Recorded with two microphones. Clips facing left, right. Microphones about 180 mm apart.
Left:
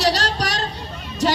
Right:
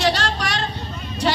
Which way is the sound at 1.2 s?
45° left (ahead or behind).